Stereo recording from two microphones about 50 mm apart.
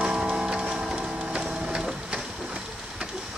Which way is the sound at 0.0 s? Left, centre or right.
Centre.